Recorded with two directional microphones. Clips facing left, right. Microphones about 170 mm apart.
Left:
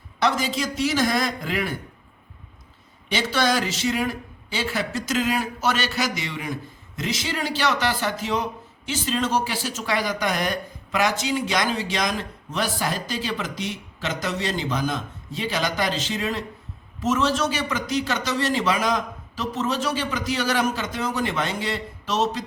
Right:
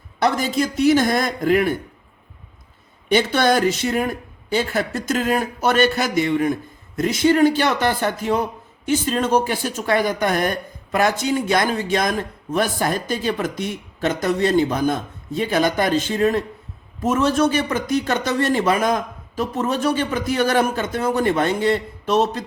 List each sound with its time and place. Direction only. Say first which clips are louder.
0.2 s speech: right 4 dB; 50° right (ahead or behind)
3.1 s speech: right 6 dB; 55° right (ahead or behind)